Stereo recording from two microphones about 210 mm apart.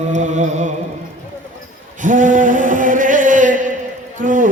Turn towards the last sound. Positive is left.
turn(degrees=-40)  # may be behind; listen again after turning